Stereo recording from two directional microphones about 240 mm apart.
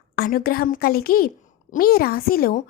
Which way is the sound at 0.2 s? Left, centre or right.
Left.